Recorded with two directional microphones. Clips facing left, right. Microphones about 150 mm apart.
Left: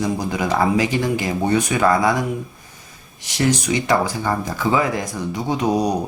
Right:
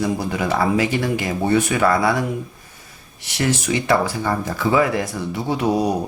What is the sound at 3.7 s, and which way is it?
Speech, 15° left (ahead or behind).